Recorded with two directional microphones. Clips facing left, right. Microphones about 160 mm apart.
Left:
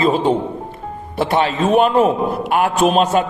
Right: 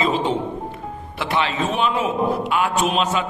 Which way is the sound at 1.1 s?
45° left (ahead or behind).